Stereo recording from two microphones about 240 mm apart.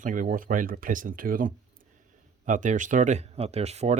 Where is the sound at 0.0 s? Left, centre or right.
Right.